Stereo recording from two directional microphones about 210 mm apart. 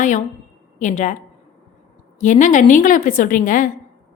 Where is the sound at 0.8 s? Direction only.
35° left (ahead or behind).